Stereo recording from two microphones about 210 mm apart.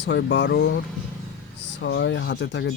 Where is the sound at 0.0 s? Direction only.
55° left (ahead or behind).